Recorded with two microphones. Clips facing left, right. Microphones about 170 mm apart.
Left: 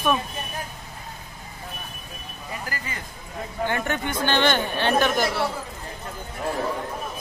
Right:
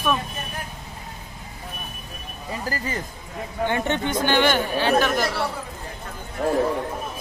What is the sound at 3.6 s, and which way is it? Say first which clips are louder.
Speech: right 3 dB; 20° right (ahead or behind).